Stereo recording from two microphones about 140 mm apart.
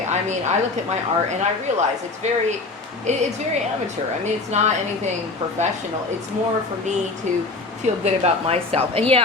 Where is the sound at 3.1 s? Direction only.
55° right (ahead or behind).